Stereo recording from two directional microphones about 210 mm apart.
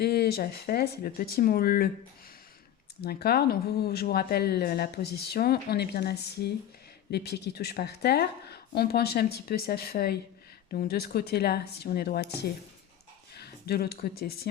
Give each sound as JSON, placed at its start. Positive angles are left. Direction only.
{"t": 0.0, "sound": "speech", "side_deg": 50}
{"t": 3.0, "sound": "speech", "side_deg": 50}